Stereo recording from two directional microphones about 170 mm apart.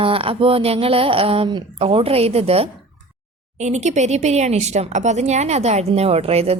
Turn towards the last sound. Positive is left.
turn(degrees=-35)  # may be behind; listen again after turning